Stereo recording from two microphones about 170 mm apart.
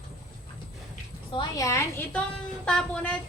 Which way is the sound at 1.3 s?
25° left (ahead or behind).